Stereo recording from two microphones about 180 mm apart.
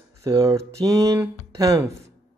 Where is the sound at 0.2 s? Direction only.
20° right (ahead or behind).